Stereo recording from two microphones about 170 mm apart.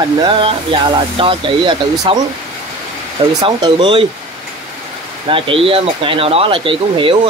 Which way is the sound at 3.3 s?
25° right (ahead or behind).